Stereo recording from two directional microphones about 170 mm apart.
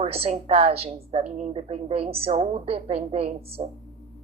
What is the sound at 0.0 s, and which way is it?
A woman's voice, 35° right (ahead or behind).